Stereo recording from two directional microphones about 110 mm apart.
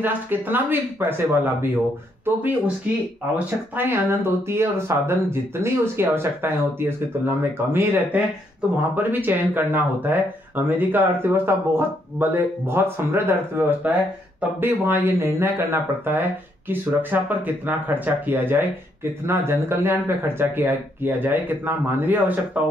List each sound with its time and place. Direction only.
0.0 s speech: 20° right (ahead or behind)